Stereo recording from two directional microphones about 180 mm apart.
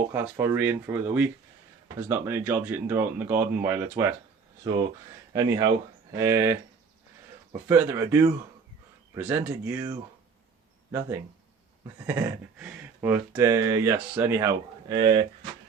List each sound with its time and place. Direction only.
0.1 s speech: 15° right (ahead or behind)
12.0 s speech: 10° right (ahead or behind)